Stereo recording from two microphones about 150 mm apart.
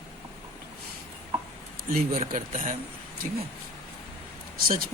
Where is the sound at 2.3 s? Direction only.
60° right (ahead or behind).